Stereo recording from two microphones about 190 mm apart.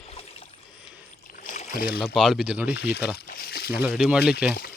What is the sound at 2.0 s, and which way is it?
Speech, centre (ahead or behind).